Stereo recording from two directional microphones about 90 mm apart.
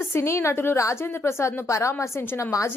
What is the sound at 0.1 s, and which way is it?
A woman's voice, 30° left (ahead or behind).